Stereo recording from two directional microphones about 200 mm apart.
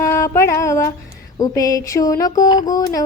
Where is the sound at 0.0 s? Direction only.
15° left (ahead or behind).